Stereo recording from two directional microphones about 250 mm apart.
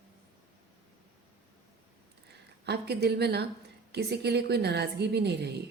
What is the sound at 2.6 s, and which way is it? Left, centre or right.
A woman's voice, right.